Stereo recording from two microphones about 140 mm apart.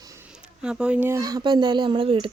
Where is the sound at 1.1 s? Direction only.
25° right (ahead or behind).